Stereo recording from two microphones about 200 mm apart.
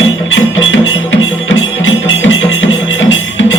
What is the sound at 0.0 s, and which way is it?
Music, 75° left (ahead or behind).